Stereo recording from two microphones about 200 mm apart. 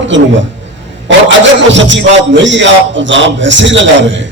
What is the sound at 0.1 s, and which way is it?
A man's voice, 65° right (ahead or behind).